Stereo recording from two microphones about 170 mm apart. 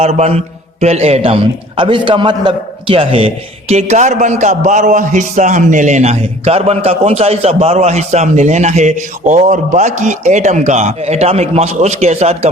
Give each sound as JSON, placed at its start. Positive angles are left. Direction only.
{"t": 0.0, "sound": "a man's voice", "side_deg": -40}